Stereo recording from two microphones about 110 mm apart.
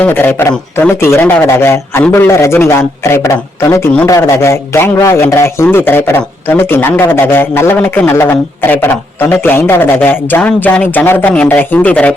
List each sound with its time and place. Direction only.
0.0 s a man's voice: 20° left (ahead or behind)